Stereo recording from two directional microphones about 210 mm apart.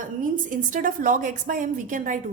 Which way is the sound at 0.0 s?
40° right (ahead or behind).